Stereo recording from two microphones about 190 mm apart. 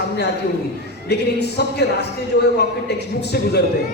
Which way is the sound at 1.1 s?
60° left (ahead or behind).